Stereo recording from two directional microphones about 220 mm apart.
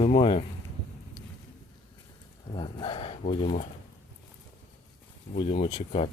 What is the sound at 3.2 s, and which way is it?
Speech, 30° left (ahead or behind).